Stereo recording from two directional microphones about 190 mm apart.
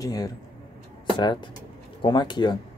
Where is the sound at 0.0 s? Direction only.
20° left (ahead or behind).